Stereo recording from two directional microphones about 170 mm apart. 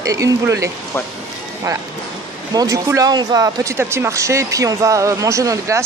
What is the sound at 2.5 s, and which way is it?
Speech, 20° right (ahead or behind).